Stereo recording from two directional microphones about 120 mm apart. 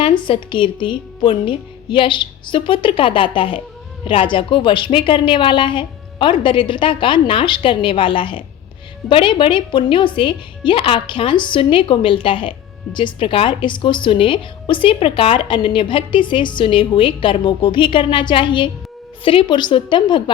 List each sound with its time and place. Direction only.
0.0 s a woman's voice: 40° left (ahead or behind)